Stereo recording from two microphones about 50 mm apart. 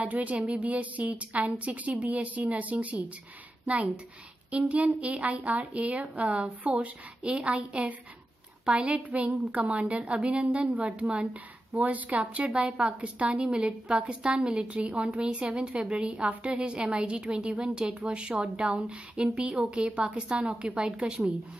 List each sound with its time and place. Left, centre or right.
0.1 s a woman's voice: right